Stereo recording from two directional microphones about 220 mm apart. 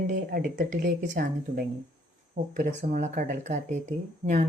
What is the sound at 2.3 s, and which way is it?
Speech, 35° right (ahead or behind).